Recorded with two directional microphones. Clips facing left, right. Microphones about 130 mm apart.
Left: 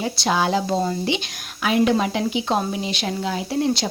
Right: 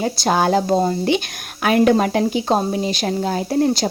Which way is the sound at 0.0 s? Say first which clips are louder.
Right 4 dB; 45° right (ahead or behind).